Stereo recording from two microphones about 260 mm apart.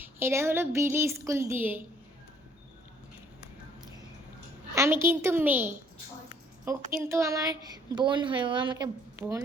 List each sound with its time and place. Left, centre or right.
0.0 s speech: centre
4.7 s speech: centre